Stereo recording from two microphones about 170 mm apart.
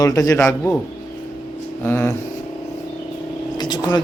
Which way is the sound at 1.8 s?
15° left (ahead or behind).